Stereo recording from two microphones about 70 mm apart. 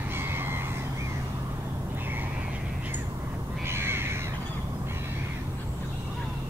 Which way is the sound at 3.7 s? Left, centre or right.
Right.